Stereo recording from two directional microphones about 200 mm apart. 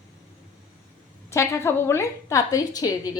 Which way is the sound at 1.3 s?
15° left (ahead or behind).